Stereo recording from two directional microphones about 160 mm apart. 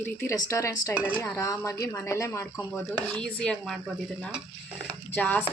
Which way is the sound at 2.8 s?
5° left (ahead or behind).